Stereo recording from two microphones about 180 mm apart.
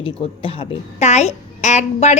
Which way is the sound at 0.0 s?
30° left (ahead or behind).